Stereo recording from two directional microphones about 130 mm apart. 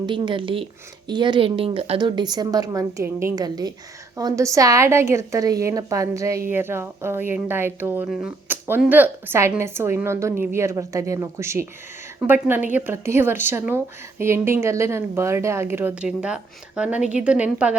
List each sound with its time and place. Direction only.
0.0 s speech: 40° right (ahead or behind)
2.0 s a woman's voice: 35° right (ahead or behind); by 8.1 s 15° right (ahead or behind)
8.4 s a sound: 15° right (ahead or behind)
8.9 s a woman's voice: 15° right (ahead or behind)